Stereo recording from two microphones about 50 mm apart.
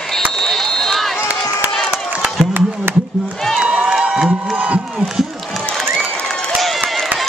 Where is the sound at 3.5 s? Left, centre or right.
Centre.